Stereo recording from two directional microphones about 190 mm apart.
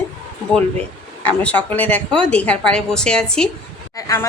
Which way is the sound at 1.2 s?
5° left (ahead or behind).